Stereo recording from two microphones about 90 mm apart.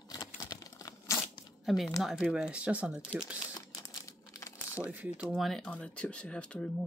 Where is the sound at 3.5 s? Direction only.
40° left (ahead or behind).